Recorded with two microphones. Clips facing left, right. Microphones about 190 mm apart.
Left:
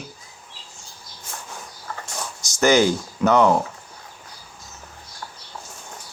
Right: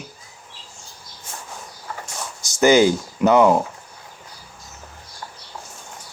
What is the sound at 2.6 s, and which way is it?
Speech, 10° right (ahead or behind).